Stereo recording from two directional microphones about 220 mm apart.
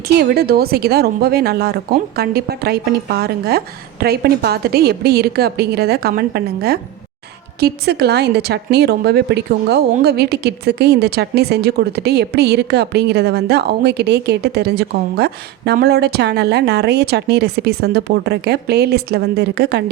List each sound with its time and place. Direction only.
0.2 s a woman's voice: 45° right (ahead or behind)